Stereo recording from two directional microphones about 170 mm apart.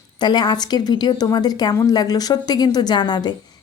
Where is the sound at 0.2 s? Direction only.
25° left (ahead or behind).